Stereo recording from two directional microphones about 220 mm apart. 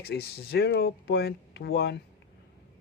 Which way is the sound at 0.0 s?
45° left (ahead or behind).